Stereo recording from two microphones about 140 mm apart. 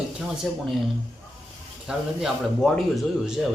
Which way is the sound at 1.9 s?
Centre (ahead or behind).